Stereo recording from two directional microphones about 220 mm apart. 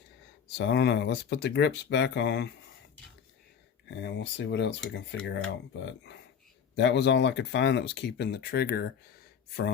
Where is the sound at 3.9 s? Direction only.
55° left (ahead or behind).